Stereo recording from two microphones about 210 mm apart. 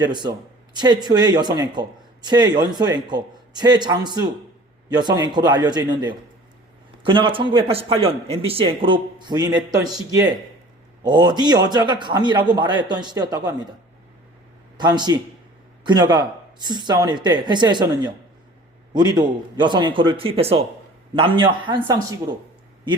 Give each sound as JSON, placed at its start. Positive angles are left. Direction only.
{"t": 0.0, "sound": "a man's voice", "side_deg": -20}
{"t": 14.8, "sound": "a man's voice", "side_deg": -20}